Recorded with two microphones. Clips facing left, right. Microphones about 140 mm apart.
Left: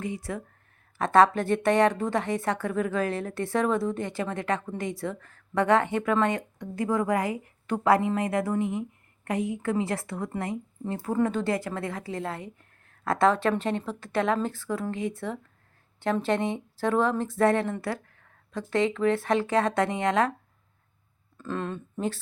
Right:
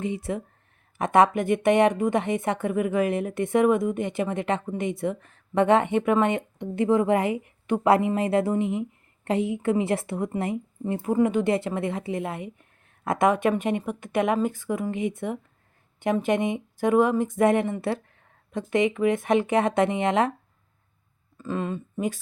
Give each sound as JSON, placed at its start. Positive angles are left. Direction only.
{"t": 0.0, "sound": "speech", "side_deg": -25}
{"t": 21.3, "sound": "speech", "side_deg": -5}